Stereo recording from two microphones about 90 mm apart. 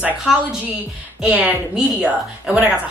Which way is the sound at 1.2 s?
15° right (ahead or behind).